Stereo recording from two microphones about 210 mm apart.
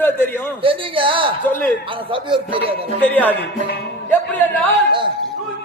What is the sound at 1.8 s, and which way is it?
Speech, 25° right (ahead or behind).